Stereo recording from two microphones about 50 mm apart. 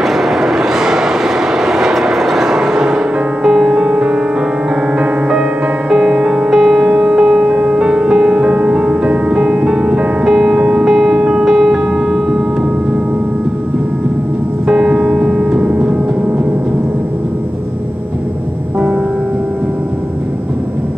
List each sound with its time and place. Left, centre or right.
0.0 s vehicle: centre
3.4 s music: centre
5.9 s music: centre
6.9 s music: right
10.6 s music: right
10.9 s music: centre
14.7 s music: centre